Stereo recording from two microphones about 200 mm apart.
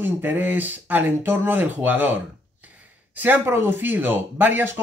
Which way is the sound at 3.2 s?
10° right (ahead or behind).